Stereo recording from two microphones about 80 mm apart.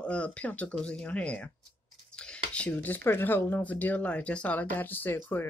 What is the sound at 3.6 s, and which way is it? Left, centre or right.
Speech, centre.